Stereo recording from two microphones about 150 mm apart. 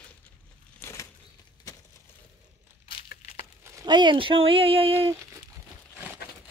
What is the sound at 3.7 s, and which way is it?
Speech, 30° right (ahead or behind).